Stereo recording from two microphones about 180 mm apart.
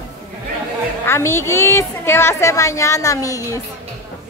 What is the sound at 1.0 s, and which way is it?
A woman's voice, 15° left (ahead or behind).